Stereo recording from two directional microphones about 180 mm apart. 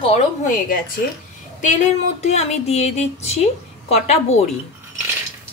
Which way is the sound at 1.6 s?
40° left (ahead or behind).